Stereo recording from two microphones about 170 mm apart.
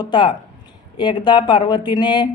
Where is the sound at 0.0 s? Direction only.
30° left (ahead or behind).